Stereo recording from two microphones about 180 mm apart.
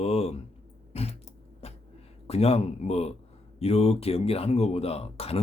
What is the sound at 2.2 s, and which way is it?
Speech, 35° left (ahead or behind).